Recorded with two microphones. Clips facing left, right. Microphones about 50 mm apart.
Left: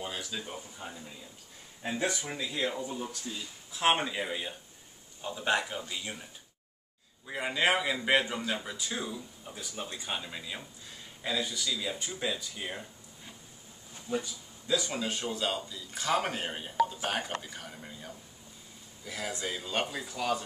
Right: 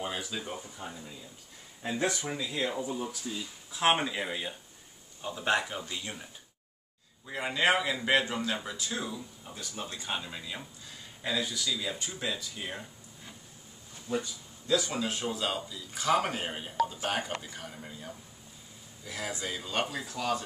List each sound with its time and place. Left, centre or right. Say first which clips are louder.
0.0 s speech: right 2 dB; centre
0.7 s a man's voice: right 1 dB; centre
2.5 s a man's voice: even; centre
7.2 s a man's voice: right 1 dB; centre